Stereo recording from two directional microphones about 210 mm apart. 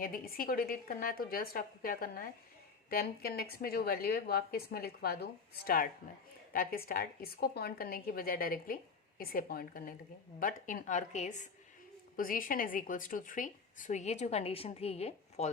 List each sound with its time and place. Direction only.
0.0 s a woman's voice: 45° left (ahead or behind)